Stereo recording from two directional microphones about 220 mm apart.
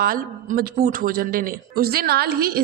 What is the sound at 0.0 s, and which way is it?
A man's voice, 40° right (ahead or behind).